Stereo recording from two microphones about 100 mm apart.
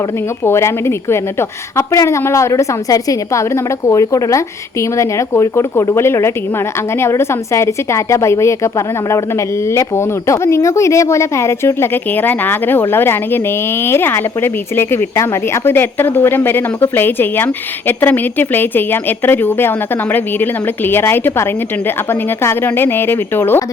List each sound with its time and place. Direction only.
0.4 s speech: 25° left (ahead or behind)